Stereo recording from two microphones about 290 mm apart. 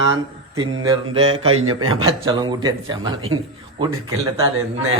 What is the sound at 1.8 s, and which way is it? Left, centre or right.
A man's voice, centre.